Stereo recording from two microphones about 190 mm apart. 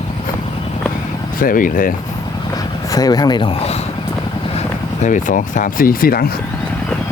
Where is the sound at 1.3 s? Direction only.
45° left (ahead or behind).